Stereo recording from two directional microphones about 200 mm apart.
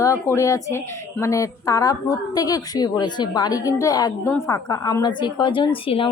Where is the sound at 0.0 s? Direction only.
15° left (ahead or behind).